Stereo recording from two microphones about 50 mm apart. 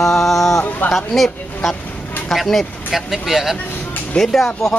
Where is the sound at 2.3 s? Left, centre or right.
Centre.